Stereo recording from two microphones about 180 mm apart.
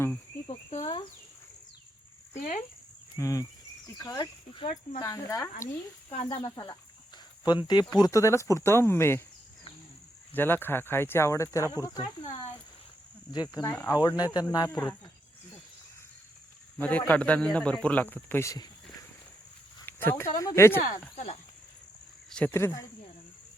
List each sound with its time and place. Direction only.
0.4 s cricket: 30° left (ahead or behind)
2.4 s speech: 45° left (ahead or behind)
3.2 s speech: 15° left (ahead or behind)
10.3 s speech: 10° left (ahead or behind)
13.3 s speech: 20° left (ahead or behind)
16.7 s speech: 10° left (ahead or behind)
19.8 s a sound: 10° left (ahead or behind)
20.3 s speech: 15° left (ahead or behind)
22.3 s speech: 5° left (ahead or behind)